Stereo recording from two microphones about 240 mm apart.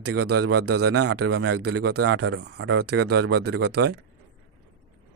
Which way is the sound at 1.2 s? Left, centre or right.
Right.